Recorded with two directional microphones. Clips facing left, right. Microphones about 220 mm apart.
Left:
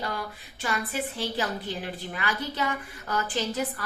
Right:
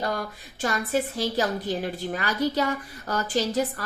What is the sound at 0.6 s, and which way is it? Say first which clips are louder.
A woman's voice: right 5 dB; 45° right (ahead or behind).